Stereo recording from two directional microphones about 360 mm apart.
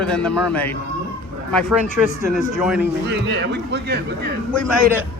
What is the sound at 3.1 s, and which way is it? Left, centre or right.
Speech, right.